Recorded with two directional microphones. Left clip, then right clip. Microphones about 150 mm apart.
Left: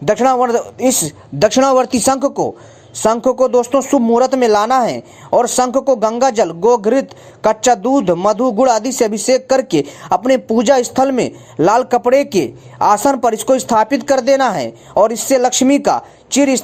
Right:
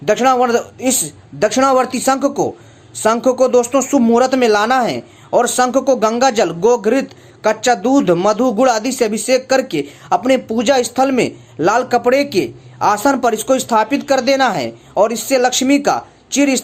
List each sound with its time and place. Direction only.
0.0 s speech: 30° left (ahead or behind)
1.4 s speech: 45° left (ahead or behind); by 16.6 s 30° left (ahead or behind)